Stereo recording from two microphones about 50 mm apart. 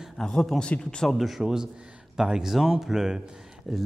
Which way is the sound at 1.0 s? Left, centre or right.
Centre.